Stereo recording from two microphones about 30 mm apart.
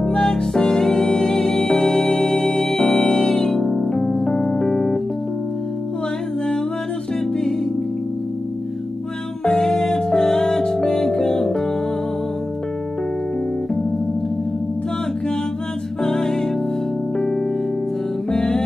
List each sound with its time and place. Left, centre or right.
0.0 s music: left
9.4 s music: left
16.0 s music: centre
18.3 s music: left